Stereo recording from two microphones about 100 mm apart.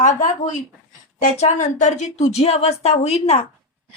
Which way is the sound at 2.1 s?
90° left.